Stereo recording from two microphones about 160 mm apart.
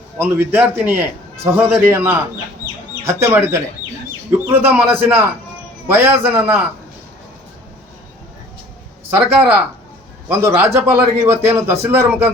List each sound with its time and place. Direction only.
0.2 s a man's voice: 10° right (ahead or behind)
9.0 s a man's voice: 15° right (ahead or behind)